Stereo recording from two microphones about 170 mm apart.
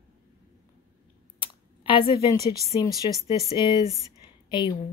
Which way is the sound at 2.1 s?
20° left (ahead or behind).